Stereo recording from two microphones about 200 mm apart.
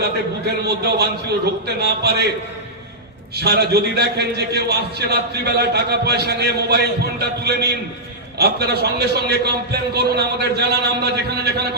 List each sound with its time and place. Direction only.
0.6 s a man's voice: 55° right (ahead or behind)
3.3 s a man's voice: 55° right (ahead or behind)